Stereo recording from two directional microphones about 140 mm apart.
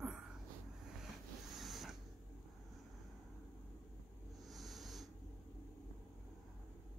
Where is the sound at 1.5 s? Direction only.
Centre (ahead or behind).